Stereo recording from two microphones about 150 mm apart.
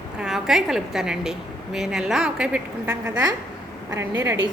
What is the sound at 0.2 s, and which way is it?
A woman's voice, 5° right (ahead or behind).